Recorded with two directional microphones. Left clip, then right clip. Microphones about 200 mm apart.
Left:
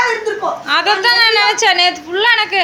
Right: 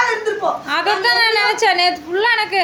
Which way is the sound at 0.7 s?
Centre (ahead or behind).